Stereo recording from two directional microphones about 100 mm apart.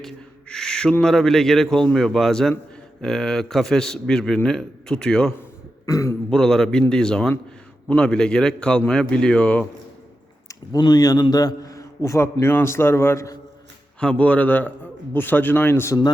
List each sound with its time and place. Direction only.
0.0 s owl: 5° left (ahead or behind)
1.0 s a man's voice: 5° left (ahead or behind)
5.8 s a man's voice: 35° left (ahead or behind)
6.3 s a man's voice: 5° left (ahead or behind)
10.5 s a man's voice: 35° left (ahead or behind)
14.0 s a man's voice: 10° left (ahead or behind)